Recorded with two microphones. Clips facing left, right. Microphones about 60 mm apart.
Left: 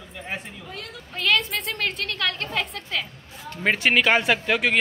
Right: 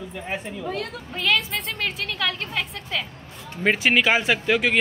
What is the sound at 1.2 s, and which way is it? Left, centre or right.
Speech, centre.